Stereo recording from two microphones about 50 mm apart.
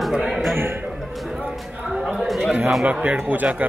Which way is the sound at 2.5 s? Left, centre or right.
Centre.